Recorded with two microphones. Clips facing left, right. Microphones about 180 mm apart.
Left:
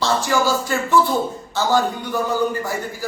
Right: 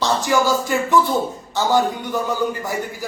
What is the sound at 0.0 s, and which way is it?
A man's voice, 15° right (ahead or behind).